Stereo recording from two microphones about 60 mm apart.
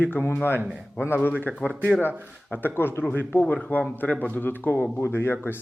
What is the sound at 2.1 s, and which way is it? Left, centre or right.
Speech, right.